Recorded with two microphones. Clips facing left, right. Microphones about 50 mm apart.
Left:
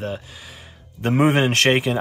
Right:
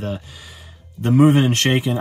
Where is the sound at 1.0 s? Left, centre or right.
Left.